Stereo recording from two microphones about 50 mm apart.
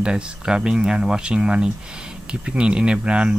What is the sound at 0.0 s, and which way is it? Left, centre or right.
Speech, centre.